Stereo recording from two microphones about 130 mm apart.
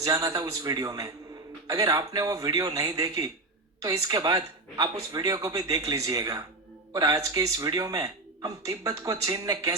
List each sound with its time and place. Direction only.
0.0 s speech: 25° right (ahead or behind)